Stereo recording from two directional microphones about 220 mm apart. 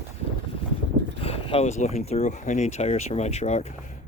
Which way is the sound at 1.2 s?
25° left (ahead or behind).